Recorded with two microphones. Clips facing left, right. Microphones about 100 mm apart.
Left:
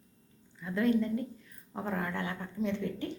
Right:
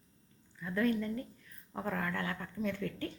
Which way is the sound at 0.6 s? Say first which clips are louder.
Left 4 dB; 25° left (ahead or behind).